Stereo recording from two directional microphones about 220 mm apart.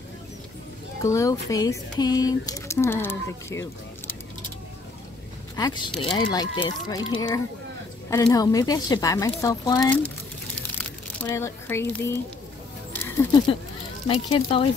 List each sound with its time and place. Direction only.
1.0 s speech: 15° left (ahead or behind)
5.6 s speech: 20° left (ahead or behind)
12.9 s a sound: 10° left (ahead or behind)
14.0 s speech: 25° left (ahead or behind)